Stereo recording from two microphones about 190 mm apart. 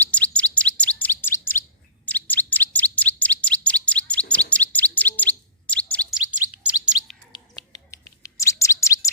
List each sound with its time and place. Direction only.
0.0 s bird: 5° left (ahead or behind)
0.8 s chirp: 10° left (ahead or behind)
6.1 s bird: 5° right (ahead or behind)
7.9 s bird: 15° left (ahead or behind)